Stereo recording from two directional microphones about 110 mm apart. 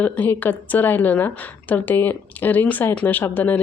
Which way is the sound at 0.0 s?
15° left (ahead or behind).